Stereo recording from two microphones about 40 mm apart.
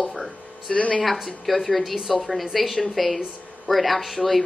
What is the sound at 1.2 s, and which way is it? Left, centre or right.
A woman's voice, centre.